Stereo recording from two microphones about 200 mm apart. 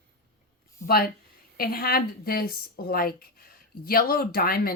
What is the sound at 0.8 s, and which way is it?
Speech, 50° left (ahead or behind).